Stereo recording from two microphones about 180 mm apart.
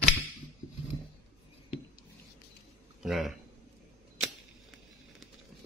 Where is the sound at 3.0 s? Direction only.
Centre (ahead or behind).